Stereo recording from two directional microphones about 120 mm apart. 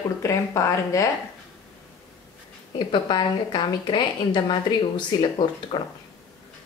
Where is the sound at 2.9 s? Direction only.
40° left (ahead or behind).